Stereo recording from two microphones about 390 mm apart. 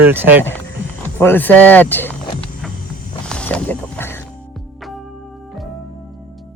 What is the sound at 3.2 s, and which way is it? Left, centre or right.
Mechanisms, centre.